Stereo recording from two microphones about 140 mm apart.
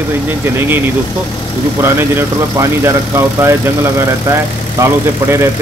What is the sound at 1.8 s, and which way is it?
Speech, 15° right (ahead or behind).